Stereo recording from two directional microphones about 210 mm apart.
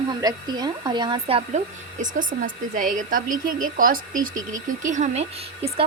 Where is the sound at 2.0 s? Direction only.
40° right (ahead or behind).